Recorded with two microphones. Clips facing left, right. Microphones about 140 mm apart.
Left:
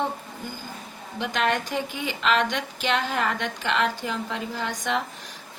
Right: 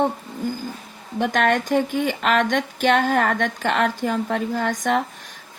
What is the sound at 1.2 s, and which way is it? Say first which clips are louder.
Speech: right 5 dB; 50° right (ahead or behind).